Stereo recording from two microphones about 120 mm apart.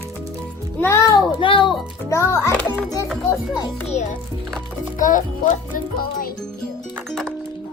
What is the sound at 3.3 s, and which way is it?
Speech, 35° left (ahead or behind).